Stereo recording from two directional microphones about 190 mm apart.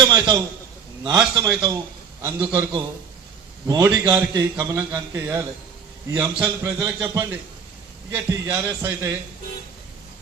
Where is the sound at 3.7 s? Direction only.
15° right (ahead or behind).